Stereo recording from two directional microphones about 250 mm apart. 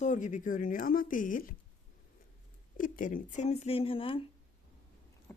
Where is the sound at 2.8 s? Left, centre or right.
Left.